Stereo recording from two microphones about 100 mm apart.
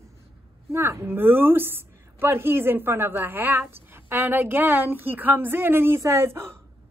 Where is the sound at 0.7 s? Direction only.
25° right (ahead or behind).